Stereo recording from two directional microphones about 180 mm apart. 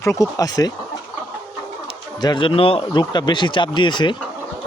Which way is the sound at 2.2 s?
25° left (ahead or behind).